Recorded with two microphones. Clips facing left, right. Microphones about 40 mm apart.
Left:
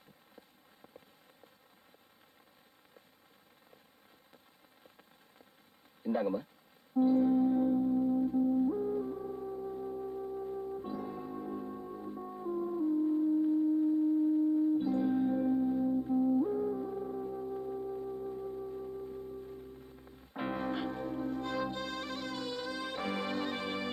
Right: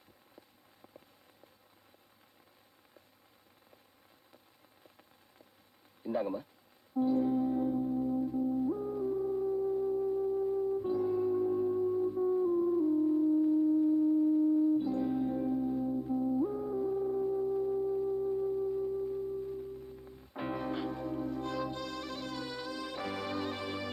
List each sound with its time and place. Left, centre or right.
0.3 s a sound: left
6.0 s a sound: left
6.9 s music: left
7.3 s music: centre
13.5 s a sound: centre
14.3 s music: centre
14.8 s music: left
15.0 s music: left
16.0 s music: centre
19.1 s music: centre
20.6 s music: left